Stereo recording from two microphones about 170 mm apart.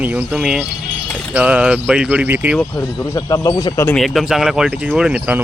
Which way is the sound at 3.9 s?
Centre (ahead or behind).